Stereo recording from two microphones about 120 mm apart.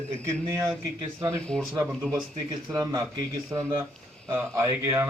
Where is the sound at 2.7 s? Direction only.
30° right (ahead or behind).